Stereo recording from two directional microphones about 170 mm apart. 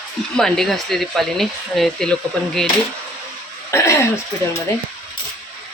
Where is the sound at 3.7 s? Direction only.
15° left (ahead or behind).